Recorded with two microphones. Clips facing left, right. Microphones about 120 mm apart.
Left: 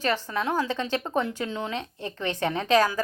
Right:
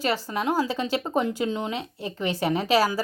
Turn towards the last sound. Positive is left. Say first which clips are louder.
# even
turn(degrees=-10)  # may be behind; listen again after turning